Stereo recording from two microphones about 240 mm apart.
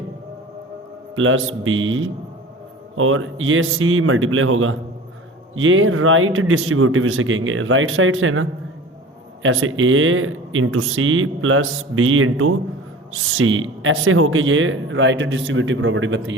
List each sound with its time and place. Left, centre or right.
1.1 s speech: right